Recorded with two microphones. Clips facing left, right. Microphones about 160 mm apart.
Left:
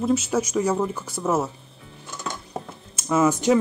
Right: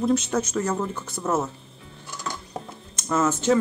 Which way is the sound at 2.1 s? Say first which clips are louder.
Left 1 dB; 25° left (ahead or behind).